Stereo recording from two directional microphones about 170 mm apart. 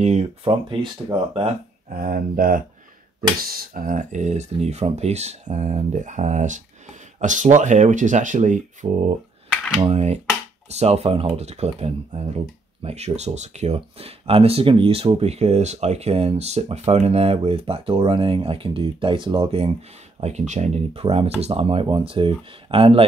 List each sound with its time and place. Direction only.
0.0 s speech: 40° right (ahead or behind)
1.9 s speech: 55° right (ahead or behind); by 23.0 s 35° right (ahead or behind)